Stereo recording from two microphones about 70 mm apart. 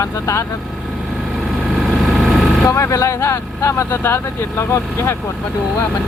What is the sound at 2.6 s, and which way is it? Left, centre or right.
Speech, left.